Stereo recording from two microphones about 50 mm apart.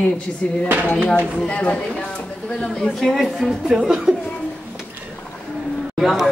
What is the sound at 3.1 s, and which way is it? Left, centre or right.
A woman's voice, centre.